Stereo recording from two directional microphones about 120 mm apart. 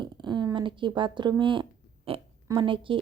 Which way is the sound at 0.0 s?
40° right (ahead or behind).